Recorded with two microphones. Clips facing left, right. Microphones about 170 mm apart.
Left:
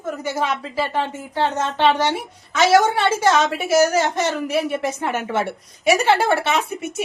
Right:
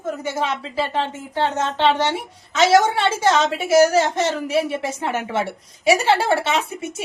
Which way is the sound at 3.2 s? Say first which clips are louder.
Right 1 dB; 25° right (ahead or behind).